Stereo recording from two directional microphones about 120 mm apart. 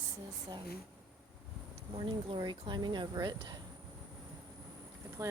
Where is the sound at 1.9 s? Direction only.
40° right (ahead or behind).